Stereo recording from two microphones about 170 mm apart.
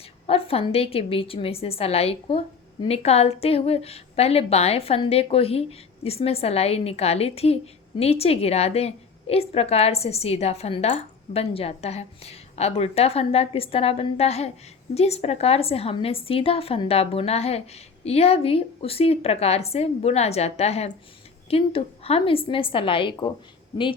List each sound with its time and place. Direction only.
0.3 s a woman's voice: 35° left (ahead or behind)